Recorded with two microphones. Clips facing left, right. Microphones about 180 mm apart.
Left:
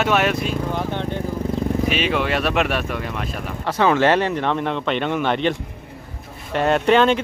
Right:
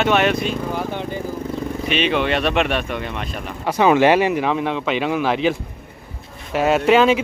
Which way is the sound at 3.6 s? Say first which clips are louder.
Right 3 dB; 15° right (ahead or behind).